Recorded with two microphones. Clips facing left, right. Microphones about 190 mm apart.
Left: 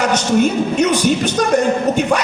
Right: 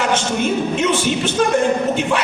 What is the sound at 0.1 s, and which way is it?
A man's voice, 40° left (ahead or behind).